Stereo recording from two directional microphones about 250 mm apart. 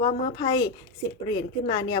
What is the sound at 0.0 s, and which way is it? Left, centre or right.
Speech, centre.